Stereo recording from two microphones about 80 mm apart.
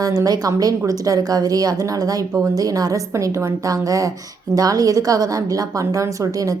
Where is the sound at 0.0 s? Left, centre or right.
Right.